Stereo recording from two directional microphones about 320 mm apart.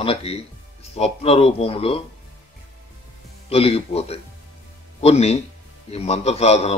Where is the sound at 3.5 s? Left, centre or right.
Centre.